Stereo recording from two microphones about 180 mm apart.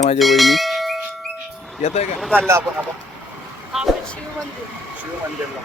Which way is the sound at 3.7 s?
Centre (ahead or behind).